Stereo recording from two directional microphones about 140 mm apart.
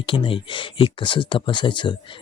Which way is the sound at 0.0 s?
40° left (ahead or behind).